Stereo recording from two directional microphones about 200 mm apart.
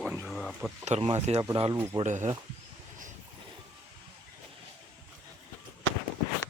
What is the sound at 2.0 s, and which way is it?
Speech, 35° right (ahead or behind).